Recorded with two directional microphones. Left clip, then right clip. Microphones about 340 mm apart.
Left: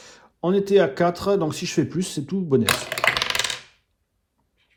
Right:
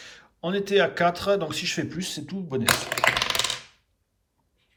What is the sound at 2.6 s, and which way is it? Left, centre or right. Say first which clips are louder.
Speech: even; centre.